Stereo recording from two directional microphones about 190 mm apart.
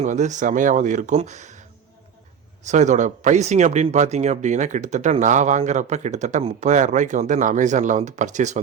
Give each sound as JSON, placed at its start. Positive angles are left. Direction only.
{"t": 0.0, "sound": "speech", "side_deg": -40}
{"t": 2.6, "sound": "speech", "side_deg": -40}